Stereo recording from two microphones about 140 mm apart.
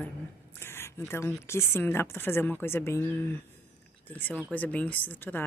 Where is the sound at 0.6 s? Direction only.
15° left (ahead or behind).